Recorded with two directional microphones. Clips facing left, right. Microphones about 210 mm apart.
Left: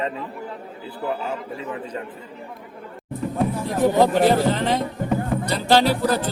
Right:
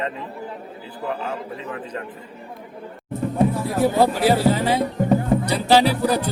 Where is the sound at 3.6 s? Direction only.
10° right (ahead or behind).